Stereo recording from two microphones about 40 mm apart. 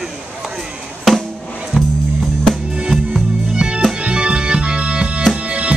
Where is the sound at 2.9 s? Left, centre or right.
Centre.